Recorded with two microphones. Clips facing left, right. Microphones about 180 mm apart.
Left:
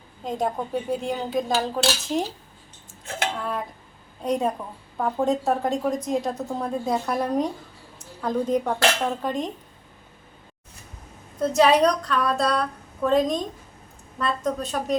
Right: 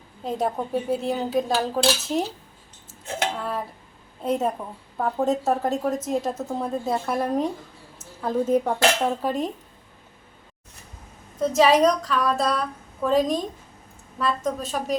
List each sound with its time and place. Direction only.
0.3 s speech: 5° right (ahead or behind)
4.2 s speech: 5° right (ahead or behind)
11.3 s speech: centre (ahead or behind)